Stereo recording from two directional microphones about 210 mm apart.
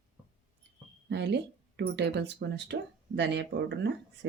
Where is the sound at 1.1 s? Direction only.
55° right (ahead or behind).